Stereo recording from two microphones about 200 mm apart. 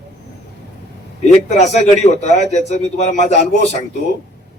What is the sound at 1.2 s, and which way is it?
Speech, 35° left (ahead or behind).